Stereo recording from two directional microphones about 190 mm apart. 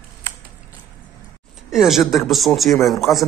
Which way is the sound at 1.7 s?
Centre (ahead or behind).